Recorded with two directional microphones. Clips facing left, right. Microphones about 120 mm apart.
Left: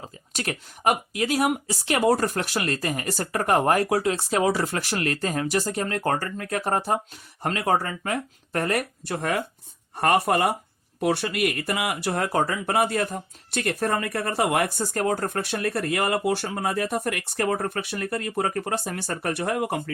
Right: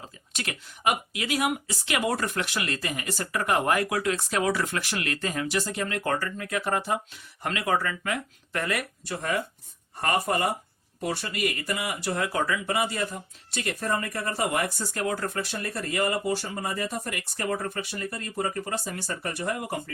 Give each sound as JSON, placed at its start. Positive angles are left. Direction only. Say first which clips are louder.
{"t": 0.3, "sound": "speech", "louder": "left 5 dB", "side_deg": 40}
{"t": 9.0, "sound": "speech", "louder": "even", "side_deg": 55}
{"t": 12.6, "sound": "speech", "louder": "left 4 dB", "side_deg": 60}